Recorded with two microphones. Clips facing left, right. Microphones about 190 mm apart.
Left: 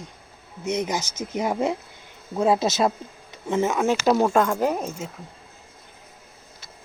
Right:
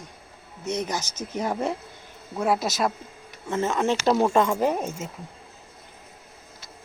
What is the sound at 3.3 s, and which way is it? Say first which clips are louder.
Speech: left 3 dB; 15° left (ahead or behind).